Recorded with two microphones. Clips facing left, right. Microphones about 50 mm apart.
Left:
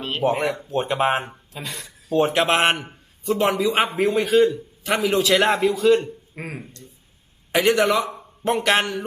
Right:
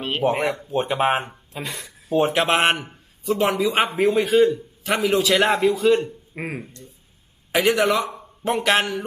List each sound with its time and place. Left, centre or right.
0.2 s speech: centre
1.5 s speech: right
2.1 s speech: centre
6.3 s speech: centre
7.5 s a man's voice: centre